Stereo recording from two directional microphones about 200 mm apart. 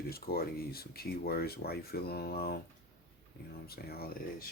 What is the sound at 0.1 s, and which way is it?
Speech, 50° left (ahead or behind).